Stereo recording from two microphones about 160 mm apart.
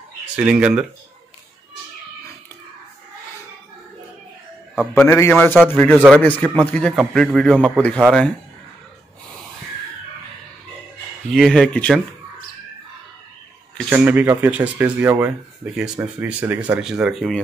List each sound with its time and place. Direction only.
0.4 s speech: 10° right (ahead or behind)
5.0 s a man's voice: 20° left (ahead or behind)
11.2 s a man's voice: centre (ahead or behind)
13.7 s speech: 5° right (ahead or behind)